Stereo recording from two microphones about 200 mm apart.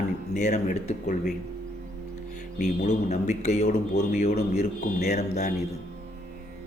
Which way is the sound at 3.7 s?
50° left (ahead or behind).